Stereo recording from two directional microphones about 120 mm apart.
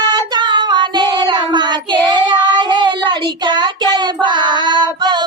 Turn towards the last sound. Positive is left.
turn(degrees=-40)  # may be behind; listen again after turning